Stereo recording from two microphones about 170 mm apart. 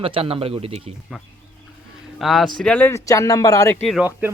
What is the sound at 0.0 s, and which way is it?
Speech, 35° right (ahead or behind).